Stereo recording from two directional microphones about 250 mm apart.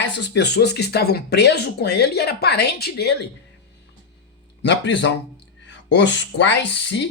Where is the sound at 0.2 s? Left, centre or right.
Left.